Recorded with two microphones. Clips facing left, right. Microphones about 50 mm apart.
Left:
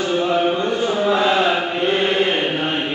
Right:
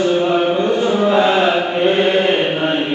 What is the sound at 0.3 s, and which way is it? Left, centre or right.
Mantra, right.